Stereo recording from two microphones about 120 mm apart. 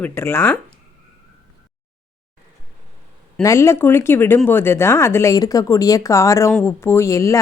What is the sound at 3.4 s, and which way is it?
Speech, 25° left (ahead or behind).